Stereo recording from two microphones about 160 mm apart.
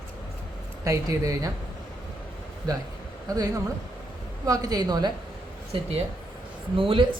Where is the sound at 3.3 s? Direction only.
25° right (ahead or behind).